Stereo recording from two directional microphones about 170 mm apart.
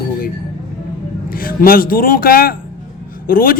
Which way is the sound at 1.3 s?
60° left (ahead or behind).